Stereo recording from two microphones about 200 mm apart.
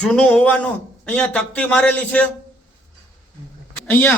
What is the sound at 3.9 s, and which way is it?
Speech, 10° left (ahead or behind).